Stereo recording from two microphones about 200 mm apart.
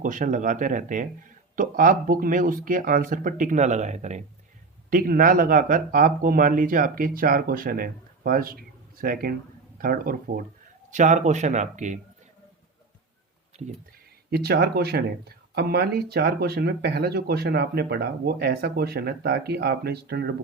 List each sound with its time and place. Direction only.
0.0 s speech: 40° right (ahead or behind)
4.9 s speech: 45° right (ahead or behind)
14.3 s speech: 50° right (ahead or behind)